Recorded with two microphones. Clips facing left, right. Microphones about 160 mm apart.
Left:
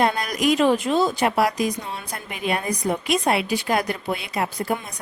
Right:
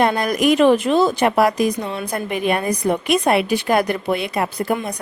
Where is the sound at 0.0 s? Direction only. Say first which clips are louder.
Right 4 dB; 60° right (ahead or behind).